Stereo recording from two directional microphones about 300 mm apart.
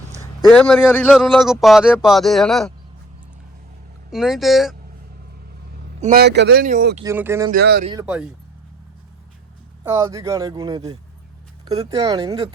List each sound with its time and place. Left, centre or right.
0.1 s speech: centre
4.1 s speech: centre
6.0 s speech: right
7.0 s speech: centre
7.5 s speech: right
9.8 s speech: centre